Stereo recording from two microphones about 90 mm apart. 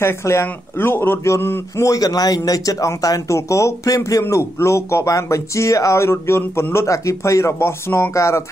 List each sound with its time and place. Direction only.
0.0 s speech: 30° left (ahead or behind)
1.9 s speech: 45° left (ahead or behind)